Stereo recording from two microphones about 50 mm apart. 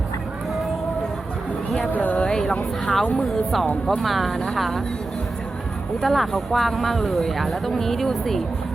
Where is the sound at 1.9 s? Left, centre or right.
Left.